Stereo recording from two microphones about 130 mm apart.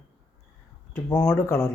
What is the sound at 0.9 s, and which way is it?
Speech, 15° left (ahead or behind).